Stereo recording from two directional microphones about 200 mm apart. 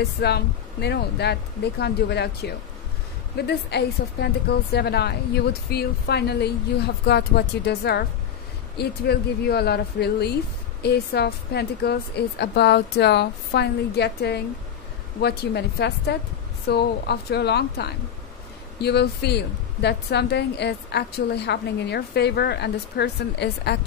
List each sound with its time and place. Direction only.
0.2 s speech: 55° left (ahead or behind)